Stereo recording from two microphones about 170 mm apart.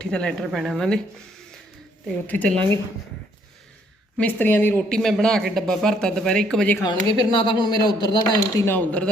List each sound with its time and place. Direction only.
0.0 s speech: 5° left (ahead or behind)
2.2 s speech: 10° left (ahead or behind)
4.2 s speech: 10° left (ahead or behind)
6.7 s speech: 25° left (ahead or behind)
8.5 s speech: 10° left (ahead or behind)